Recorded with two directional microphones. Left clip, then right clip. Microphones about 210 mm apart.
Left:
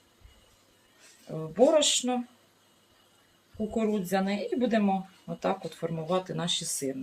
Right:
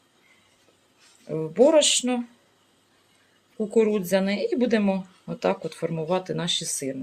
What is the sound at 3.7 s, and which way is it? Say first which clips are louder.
Speech: right 8 dB; 50° right (ahead or behind).